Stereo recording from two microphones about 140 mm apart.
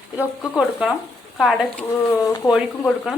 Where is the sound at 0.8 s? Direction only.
5° right (ahead or behind).